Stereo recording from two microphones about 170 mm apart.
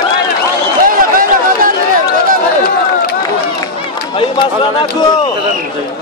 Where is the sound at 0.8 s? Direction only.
55° right (ahead or behind).